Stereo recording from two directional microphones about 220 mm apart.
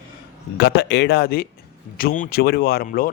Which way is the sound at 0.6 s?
50° left (ahead or behind).